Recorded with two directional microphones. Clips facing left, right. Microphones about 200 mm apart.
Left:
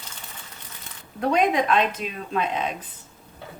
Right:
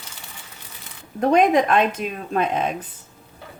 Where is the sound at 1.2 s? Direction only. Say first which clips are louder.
Right 5 dB; 50° right (ahead or behind).